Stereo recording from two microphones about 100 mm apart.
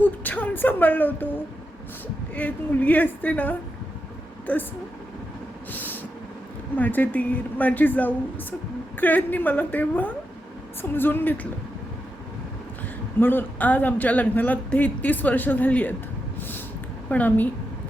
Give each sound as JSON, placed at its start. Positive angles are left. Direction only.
{"t": 0.0, "sound": "a sound", "side_deg": 15}
{"t": 2.3, "sound": "speech", "side_deg": 15}
{"t": 5.7, "sound": "vehicle", "side_deg": 20}
{"t": 6.7, "sound": "a woman's voice", "side_deg": 15}
{"t": 13.1, "sound": "speech", "side_deg": 20}
{"t": 16.4, "sound": "snort", "side_deg": 20}
{"t": 17.1, "sound": "speech", "side_deg": 15}